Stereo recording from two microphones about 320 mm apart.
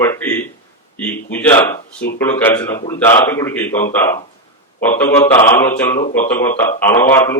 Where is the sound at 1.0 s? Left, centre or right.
Centre.